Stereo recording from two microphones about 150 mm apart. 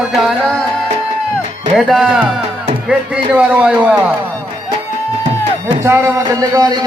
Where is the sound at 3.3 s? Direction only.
10° right (ahead or behind).